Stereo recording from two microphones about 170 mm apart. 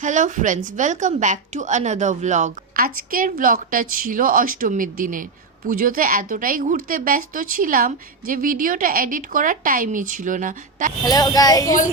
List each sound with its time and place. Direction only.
0.0 s speech: 45° right (ahead or behind)
11.0 s speech: 25° left (ahead or behind)